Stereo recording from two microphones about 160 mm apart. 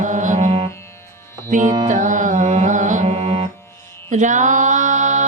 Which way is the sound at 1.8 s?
50° right (ahead or behind).